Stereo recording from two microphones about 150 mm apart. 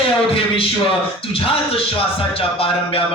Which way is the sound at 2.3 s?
40° left (ahead or behind).